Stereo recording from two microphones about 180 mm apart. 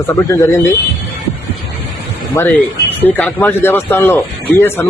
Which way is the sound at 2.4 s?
15° left (ahead or behind).